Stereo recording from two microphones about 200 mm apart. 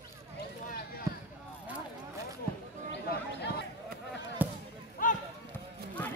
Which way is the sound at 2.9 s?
55° left (ahead or behind).